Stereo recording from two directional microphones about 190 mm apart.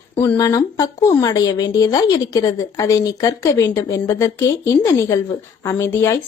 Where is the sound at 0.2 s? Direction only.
20° left (ahead or behind).